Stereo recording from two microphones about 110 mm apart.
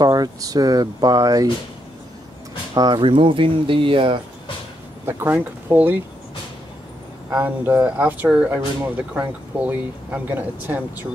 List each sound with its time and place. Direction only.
0.0 s speech: 35° right (ahead or behind)
2.7 s speech: 40° right (ahead or behind)
5.0 s speech: 20° right (ahead or behind)
7.2 s speech: 20° right (ahead or behind)